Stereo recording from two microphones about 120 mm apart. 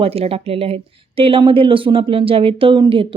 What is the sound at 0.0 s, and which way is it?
Speech, 55° right (ahead or behind).